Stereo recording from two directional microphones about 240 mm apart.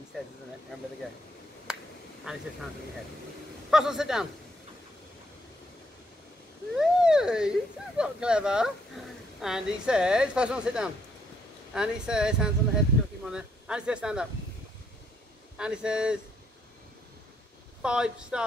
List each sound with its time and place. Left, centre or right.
1.7 s finger snapping: centre
2.3 s speech: centre
3.7 s speech: centre
6.7 s a sound: centre
8.0 s speech: centre
15.5 s speech: centre
17.8 s speech: centre